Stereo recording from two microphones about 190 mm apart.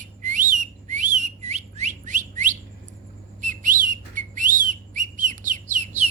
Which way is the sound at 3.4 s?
45° right (ahead or behind).